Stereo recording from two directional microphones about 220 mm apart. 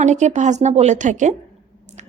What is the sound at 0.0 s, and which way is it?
A woman's voice, 30° right (ahead or behind).